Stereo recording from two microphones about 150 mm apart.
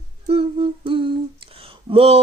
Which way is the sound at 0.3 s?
40° right (ahead or behind).